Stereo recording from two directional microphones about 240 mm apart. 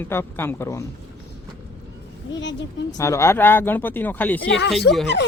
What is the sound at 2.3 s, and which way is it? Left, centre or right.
Speech, left.